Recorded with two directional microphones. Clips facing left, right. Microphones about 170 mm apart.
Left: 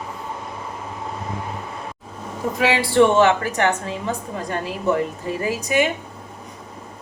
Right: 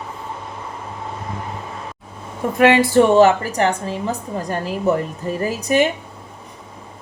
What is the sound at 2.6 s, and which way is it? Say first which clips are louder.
Speech: right 4 dB; 50° right (ahead or behind).